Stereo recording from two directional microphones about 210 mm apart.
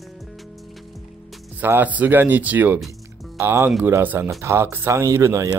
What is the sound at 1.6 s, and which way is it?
Speech, 10° right (ahead or behind).